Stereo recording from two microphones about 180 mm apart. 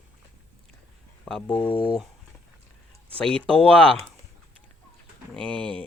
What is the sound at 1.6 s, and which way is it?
Speech, 30° left (ahead or behind).